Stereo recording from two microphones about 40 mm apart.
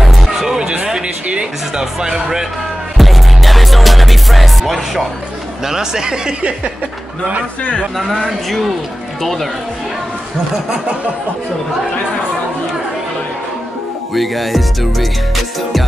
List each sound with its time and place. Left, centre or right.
0.0 s music: centre
1.8 s speech: centre
3.0 s music: centre
5.7 s speech: centre
8.3 s music: centre
14.1 s music: centre